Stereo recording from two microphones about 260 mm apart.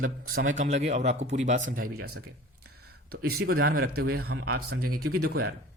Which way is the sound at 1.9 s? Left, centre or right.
Right.